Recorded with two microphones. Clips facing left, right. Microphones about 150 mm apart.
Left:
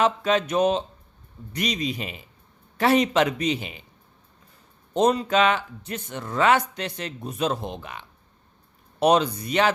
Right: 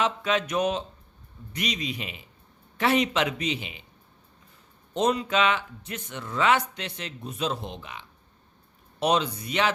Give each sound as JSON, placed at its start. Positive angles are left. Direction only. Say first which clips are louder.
{"t": 0.0, "sound": "speech", "louder": "left 4 dB", "side_deg": 35}
{"t": 4.9, "sound": "speech", "louder": "left 4 dB", "side_deg": 40}